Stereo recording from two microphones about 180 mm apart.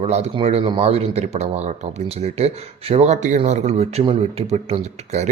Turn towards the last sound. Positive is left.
turn(degrees=-40)  # may be behind; listen again after turning